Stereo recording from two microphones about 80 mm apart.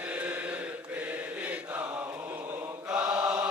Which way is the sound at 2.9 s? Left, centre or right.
Centre.